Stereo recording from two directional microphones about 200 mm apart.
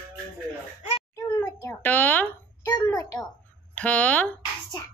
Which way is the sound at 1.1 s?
15° left (ahead or behind).